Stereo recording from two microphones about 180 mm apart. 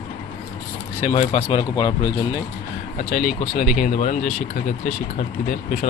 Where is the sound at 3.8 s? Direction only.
40° left (ahead or behind).